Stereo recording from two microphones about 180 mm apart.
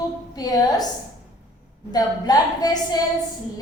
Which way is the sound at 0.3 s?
20° left (ahead or behind).